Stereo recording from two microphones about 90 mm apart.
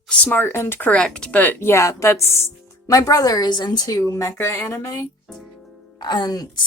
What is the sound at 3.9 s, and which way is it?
A woman's voice, 35° left (ahead or behind).